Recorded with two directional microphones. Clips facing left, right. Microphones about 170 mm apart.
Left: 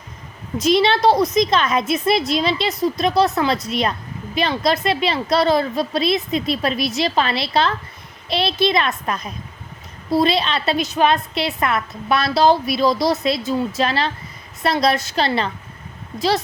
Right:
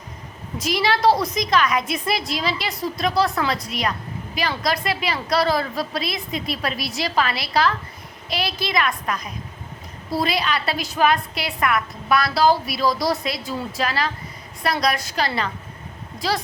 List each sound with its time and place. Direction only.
0.6 s a woman's voice: 25° left (ahead or behind)